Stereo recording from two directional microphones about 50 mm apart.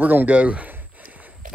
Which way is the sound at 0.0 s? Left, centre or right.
Right.